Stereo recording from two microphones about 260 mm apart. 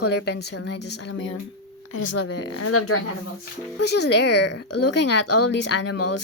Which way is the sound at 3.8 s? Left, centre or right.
Left.